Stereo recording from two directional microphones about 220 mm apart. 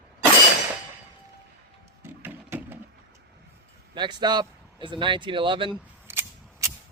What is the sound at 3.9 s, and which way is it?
Speech, 20° right (ahead or behind).